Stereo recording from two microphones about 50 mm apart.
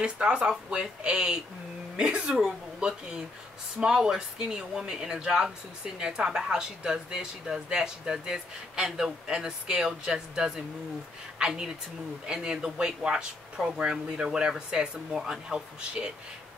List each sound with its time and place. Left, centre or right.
0.0 s speech: centre